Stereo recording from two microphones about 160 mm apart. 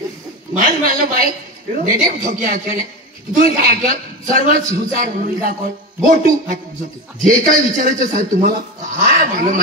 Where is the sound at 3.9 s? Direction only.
60° right (ahead or behind).